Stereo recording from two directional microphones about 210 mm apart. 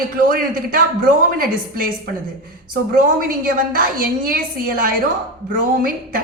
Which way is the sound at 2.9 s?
40° right (ahead or behind).